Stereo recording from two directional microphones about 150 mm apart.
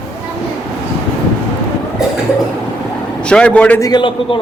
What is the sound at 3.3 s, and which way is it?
Speech, 5° left (ahead or behind).